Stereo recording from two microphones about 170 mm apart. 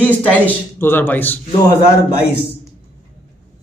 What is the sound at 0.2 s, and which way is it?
Speech, 10° left (ahead or behind).